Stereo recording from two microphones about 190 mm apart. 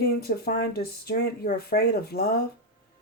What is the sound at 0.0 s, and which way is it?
Speech, 55° left (ahead or behind).